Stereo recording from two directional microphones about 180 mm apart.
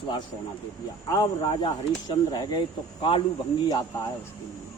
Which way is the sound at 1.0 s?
20° left (ahead or behind).